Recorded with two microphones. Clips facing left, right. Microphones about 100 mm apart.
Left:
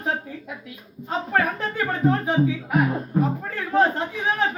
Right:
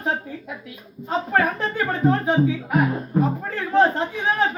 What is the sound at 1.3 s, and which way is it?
A man's voice, centre (ahead or behind).